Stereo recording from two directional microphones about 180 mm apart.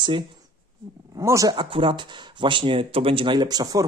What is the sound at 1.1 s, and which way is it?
Speech, 20° right (ahead or behind).